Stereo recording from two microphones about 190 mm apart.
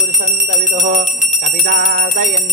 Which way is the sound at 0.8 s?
45° right (ahead or behind).